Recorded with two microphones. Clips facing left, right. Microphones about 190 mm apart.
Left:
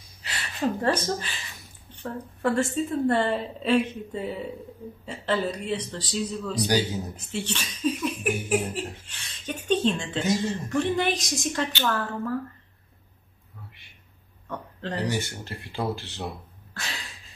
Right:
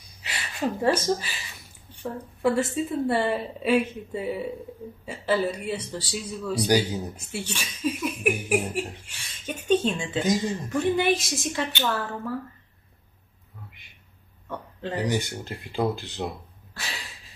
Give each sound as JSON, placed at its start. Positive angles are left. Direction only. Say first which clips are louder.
{"t": 0.2, "sound": "speech", "louder": "left 1 dB", "side_deg": -10}
{"t": 14.5, "sound": "speech", "louder": "right 1 dB", "side_deg": -10}